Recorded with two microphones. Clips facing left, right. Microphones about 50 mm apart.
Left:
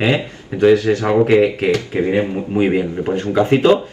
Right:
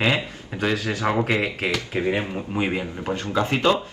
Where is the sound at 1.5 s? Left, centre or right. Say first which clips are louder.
Left 8 dB; left.